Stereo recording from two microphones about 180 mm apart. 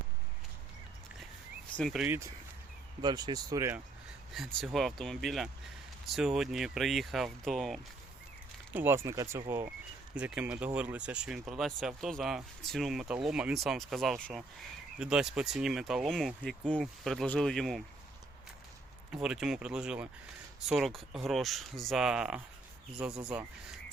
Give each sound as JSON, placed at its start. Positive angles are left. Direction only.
{"t": 1.7, "sound": "speech", "side_deg": 0}
{"t": 2.0, "sound": "speech", "side_deg": -15}
{"t": 4.3, "sound": "speech", "side_deg": 0}
{"t": 8.7, "sound": "speech", "side_deg": -10}
{"t": 19.1, "sound": "speech", "side_deg": -5}